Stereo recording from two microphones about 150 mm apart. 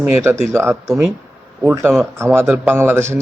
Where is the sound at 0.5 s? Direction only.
15° right (ahead or behind).